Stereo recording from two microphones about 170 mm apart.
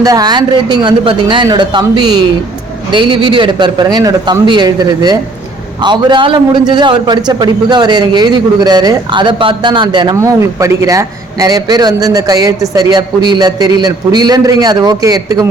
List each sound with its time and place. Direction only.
0.0 s a man's voice: 20° right (ahead or behind)